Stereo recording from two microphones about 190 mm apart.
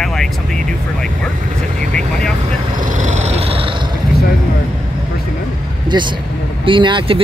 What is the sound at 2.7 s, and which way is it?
Cat, 40° right (ahead or behind).